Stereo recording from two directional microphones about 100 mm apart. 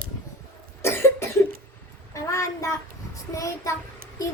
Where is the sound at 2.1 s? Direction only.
30° left (ahead or behind).